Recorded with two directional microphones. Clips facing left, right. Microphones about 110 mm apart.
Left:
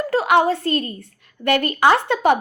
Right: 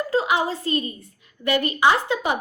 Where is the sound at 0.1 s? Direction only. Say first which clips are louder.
Left 7 dB; 65° left (ahead or behind).